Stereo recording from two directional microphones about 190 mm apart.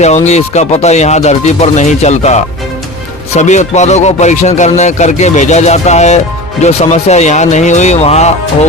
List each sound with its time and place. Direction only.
0.0 s speech: 35° left (ahead or behind)